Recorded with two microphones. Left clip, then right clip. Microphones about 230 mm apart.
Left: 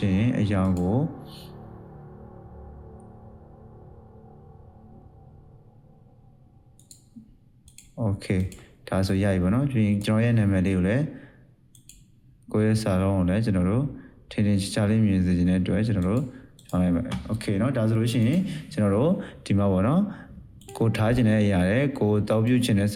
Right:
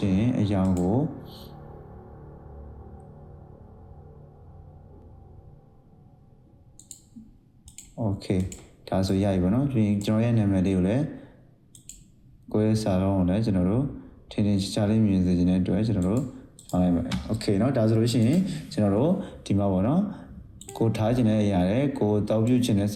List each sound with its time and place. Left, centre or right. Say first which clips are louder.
0.0 s typing: even; left
0.9 s speech: right 1 dB; left
8.0 s speech: even; left
12.5 s speech: even; left
17.2 s speech: right 4 dB; left